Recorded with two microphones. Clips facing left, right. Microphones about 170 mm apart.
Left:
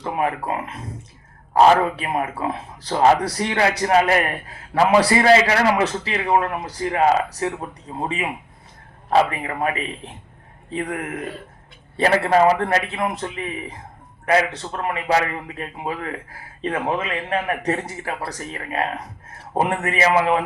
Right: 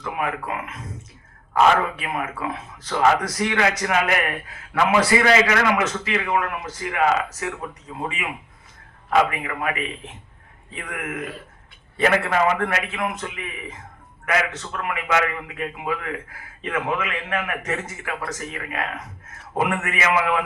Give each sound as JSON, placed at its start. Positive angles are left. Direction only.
{"t": 0.0, "sound": "a man's voice", "side_deg": 35}
{"t": 10.8, "sound": "a man's voice", "side_deg": 35}